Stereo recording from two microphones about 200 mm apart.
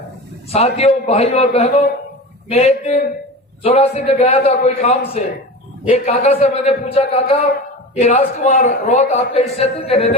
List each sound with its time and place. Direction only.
0.5 s a man's voice: 30° left (ahead or behind)